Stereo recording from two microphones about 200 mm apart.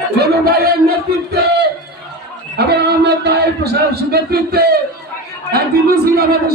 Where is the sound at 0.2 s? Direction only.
50° right (ahead or behind).